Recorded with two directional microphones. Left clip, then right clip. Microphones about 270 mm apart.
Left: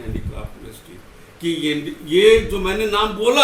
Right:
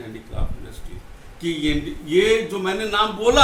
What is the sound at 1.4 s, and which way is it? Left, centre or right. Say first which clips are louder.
A man's voice: left 2 dB; centre.